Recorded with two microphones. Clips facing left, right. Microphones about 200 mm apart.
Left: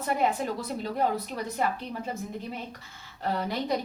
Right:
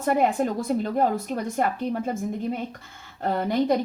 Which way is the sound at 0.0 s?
50° right (ahead or behind).